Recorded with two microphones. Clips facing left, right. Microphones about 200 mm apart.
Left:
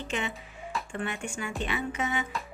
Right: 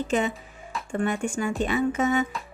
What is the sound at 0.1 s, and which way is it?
A woman's voice, 40° right (ahead or behind).